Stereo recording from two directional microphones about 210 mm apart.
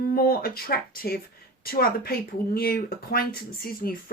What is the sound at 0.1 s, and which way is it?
Speech, 45° left (ahead or behind).